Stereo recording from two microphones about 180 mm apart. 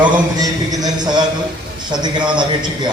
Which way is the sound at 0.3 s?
20° right (ahead or behind).